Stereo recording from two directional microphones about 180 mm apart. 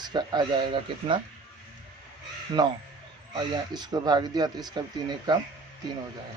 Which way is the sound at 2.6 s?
20° right (ahead or behind).